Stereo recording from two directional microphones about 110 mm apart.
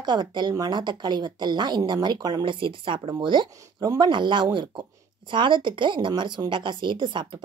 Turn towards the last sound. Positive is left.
turn(degrees=-45)  # may be behind; listen again after turning